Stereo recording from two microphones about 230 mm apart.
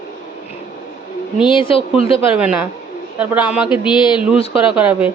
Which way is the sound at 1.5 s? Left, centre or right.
Left.